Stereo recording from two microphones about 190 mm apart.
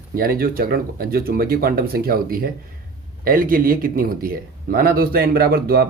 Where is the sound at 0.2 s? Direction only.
50° right (ahead or behind).